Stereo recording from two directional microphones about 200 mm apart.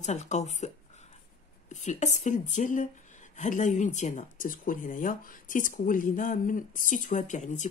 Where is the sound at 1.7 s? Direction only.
35° left (ahead or behind).